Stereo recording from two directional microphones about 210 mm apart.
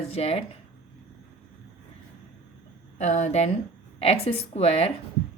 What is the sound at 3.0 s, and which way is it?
Speech, 35° left (ahead or behind).